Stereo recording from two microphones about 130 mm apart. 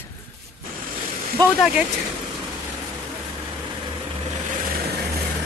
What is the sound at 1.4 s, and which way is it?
Speech, 35° right (ahead or behind).